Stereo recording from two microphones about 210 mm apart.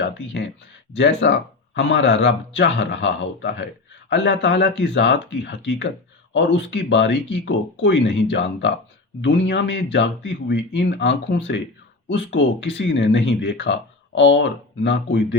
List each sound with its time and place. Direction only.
0.0 s speech: 60° left (ahead or behind)